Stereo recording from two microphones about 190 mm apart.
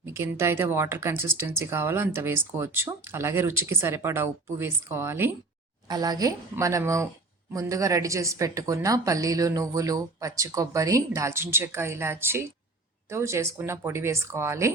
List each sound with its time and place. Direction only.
0.0 s speech: 15° right (ahead or behind)